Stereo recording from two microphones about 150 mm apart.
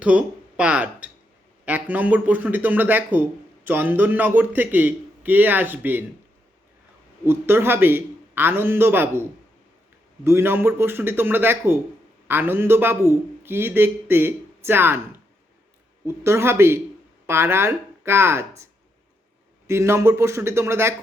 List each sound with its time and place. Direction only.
0.0 s speech: 10° right (ahead or behind)
7.3 s speech: 15° right (ahead or behind)
10.2 s speech: 15° right (ahead or behind)